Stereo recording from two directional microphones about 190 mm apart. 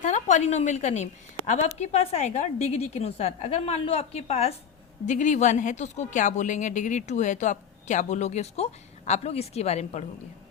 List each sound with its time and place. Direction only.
0.0 s a woman's voice: 40° left (ahead or behind)